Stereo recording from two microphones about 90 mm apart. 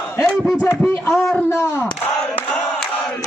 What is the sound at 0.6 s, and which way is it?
Speech, 30° left (ahead or behind).